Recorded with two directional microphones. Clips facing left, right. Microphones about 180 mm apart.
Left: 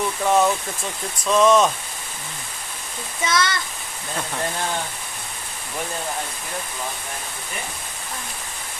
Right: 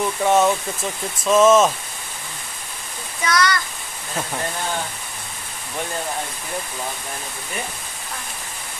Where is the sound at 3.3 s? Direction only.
25° left (ahead or behind).